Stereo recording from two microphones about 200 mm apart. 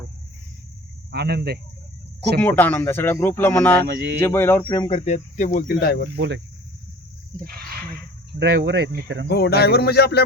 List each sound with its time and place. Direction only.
1.1 s speech: 55° right (ahead or behind)
2.4 s speech: 10° left (ahead or behind)
4.8 s speech: 25° left (ahead or behind); by 6.1 s 50° left (ahead or behind)
6.1 s speech: 65° right (ahead or behind)
8.4 s speech: 60° right (ahead or behind)
9.2 s speech: 55° left (ahead or behind)